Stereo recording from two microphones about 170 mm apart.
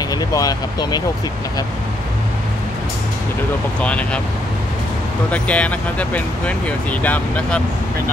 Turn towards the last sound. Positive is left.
turn(degrees=10)  # may be behind; listen again after turning